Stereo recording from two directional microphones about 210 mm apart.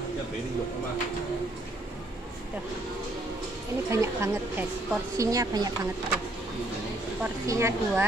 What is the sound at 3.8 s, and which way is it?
A woman's voice, 10° right (ahead or behind).